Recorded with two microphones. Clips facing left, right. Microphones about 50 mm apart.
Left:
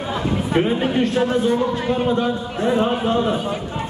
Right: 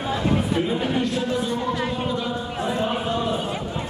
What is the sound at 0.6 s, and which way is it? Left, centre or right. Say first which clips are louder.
A man's voice: left 5 dB; left.